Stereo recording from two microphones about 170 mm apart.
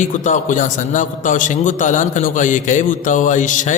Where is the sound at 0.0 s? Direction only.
45° left (ahead or behind).